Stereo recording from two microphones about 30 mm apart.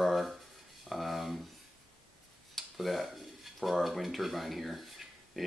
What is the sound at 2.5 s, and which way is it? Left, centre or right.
Tick-tock, centre.